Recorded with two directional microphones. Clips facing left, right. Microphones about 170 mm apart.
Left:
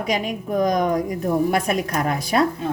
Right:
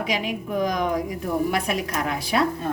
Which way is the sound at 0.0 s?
40° left (ahead or behind).